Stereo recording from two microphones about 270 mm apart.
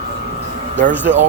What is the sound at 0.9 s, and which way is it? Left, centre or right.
Speech, centre.